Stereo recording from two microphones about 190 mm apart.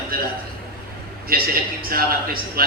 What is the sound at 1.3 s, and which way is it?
A man's voice, 50° right (ahead or behind).